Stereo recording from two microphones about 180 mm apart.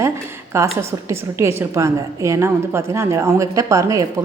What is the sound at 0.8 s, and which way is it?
A woman's voice, 15° right (ahead or behind).